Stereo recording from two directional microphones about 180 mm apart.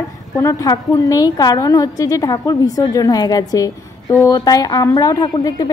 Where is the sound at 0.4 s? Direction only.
20° left (ahead or behind).